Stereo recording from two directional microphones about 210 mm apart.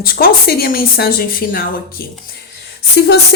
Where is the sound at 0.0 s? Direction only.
45° left (ahead or behind).